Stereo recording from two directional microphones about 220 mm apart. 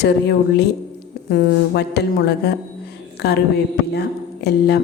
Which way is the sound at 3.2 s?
45° left (ahead or behind).